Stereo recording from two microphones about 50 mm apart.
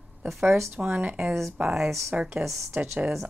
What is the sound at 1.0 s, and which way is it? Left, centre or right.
Speech, right.